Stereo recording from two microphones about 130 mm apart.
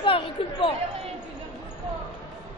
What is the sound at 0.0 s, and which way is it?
Chatter, 40° left (ahead or behind).